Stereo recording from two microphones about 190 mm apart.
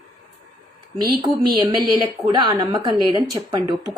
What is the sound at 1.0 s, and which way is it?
Speech, 20° right (ahead or behind).